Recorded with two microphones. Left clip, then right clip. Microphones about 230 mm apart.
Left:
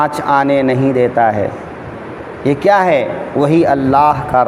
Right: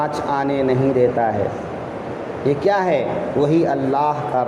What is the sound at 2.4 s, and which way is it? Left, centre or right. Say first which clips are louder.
A man's voice: left 7 dB; left.